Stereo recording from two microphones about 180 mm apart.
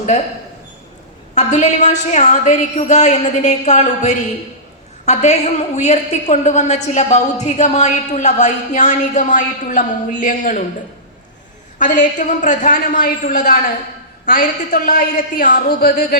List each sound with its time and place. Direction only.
1.4 s a woman's voice: 40° left (ahead or behind)
11.8 s a man's voice: 45° left (ahead or behind)